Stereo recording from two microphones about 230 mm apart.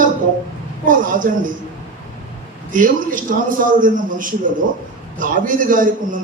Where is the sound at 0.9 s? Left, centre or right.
Right.